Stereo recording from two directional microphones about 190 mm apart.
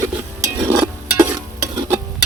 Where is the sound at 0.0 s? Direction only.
15° right (ahead or behind).